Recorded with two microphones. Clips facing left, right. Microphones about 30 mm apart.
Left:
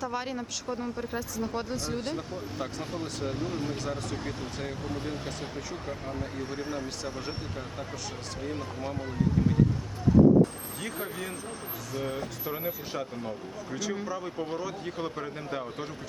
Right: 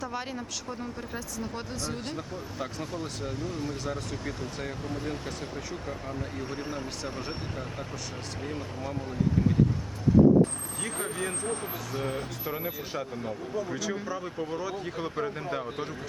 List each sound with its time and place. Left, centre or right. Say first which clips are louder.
0.0 s speech: left 2 dB; centre
3.4 s speech: even; centre
3.8 s speech: even; centre
8.5 s speech: left 1 dB; centre
10.9 s speech: right 5 dB; centre
12.5 s speech: left 1 dB; centre